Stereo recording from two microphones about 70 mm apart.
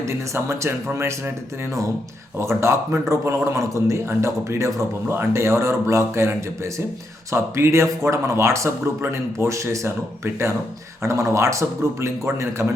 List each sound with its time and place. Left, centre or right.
0.0 s speech: right
2.4 s speech: right
11.0 s speech: right